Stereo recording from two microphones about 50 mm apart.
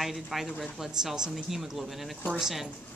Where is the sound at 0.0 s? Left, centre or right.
Centre.